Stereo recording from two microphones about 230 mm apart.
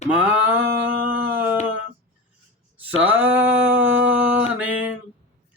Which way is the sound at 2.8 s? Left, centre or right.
Centre.